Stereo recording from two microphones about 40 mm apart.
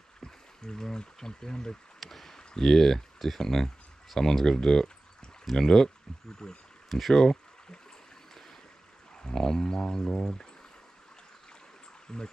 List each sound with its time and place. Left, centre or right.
0.2 s speech: centre
2.0 s speech: centre
6.4 s speech: left
6.9 s speech: centre
9.2 s speech: centre
12.1 s speech: centre